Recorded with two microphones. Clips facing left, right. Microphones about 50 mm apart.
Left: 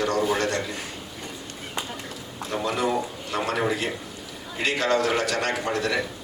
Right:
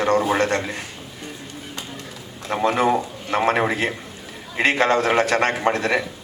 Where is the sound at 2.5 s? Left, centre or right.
Right.